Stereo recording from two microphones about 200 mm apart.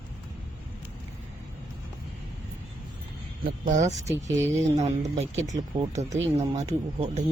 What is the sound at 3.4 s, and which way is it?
Speech, 40° right (ahead or behind).